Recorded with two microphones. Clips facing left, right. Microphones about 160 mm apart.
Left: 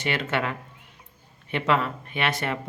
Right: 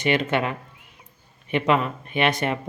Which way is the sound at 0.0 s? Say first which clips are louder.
Right 5 dB; 20° right (ahead or behind).